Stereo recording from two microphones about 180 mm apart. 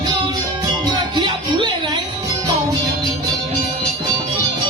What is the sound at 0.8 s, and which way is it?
Music, 25° right (ahead or behind).